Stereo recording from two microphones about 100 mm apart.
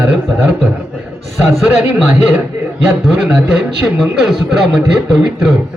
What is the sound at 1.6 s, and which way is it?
A man's voice, 15° right (ahead or behind).